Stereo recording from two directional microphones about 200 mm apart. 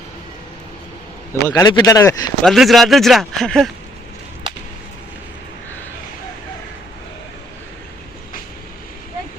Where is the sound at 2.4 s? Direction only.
Centre (ahead or behind).